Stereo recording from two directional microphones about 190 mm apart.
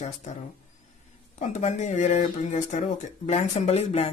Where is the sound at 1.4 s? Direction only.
40° left (ahead or behind).